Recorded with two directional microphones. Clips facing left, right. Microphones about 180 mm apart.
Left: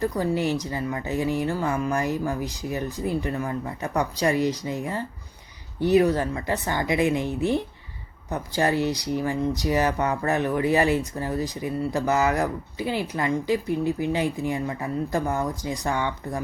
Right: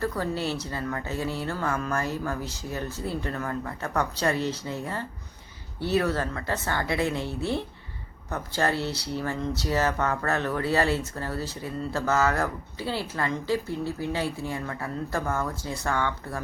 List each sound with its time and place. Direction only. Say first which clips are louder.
0.0 s speech: left 4 dB; 15° left (ahead or behind)